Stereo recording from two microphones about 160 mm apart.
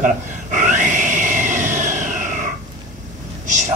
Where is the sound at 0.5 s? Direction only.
50° right (ahead or behind).